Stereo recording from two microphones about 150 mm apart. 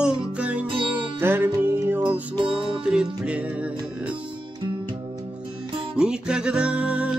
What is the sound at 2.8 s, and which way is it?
Music, 5° right (ahead or behind).